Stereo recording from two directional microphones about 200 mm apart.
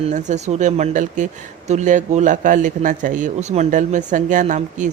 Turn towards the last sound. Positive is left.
turn(degrees=-40)  # may be behind; listen again after turning